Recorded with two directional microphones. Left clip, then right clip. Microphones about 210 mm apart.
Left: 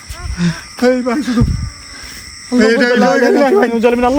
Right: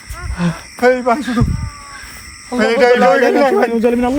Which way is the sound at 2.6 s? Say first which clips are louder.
Even; 25° right (ahead or behind).